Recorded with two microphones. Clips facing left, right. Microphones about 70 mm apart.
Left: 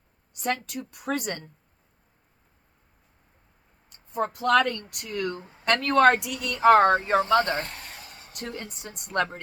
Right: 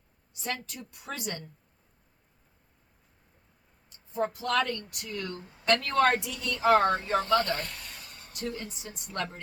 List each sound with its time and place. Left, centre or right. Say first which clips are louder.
0.4 s a woman's voice: left 7 dB; left
3.8 s speech: left 2 dB; left
7.2 s vehicle: left 4 dB; left
8.3 s speech: even; left